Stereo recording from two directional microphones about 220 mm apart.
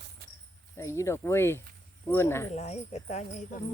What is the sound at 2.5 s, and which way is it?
Speech, 30° left (ahead or behind).